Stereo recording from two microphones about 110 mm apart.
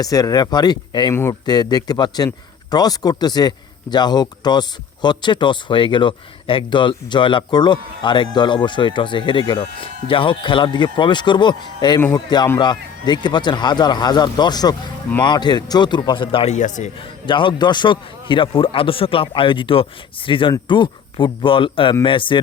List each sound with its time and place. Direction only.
0.0 s a man's voice: 35° left (ahead or behind)
1.1 s speech: 25° left (ahead or behind)
1.5 s a man's voice: 40° left (ahead or behind)
16.5 s a man's voice: 90° left
17.0 s speech: 50° left (ahead or behind)